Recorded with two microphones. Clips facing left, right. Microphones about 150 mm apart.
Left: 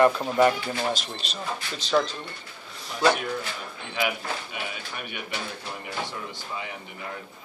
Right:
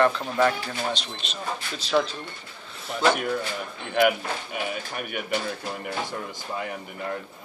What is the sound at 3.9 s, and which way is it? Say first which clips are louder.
A man's voice: right 7 dB; 50° right (ahead or behind).